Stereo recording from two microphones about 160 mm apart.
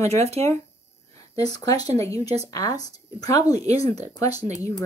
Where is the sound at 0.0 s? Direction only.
20° left (ahead or behind).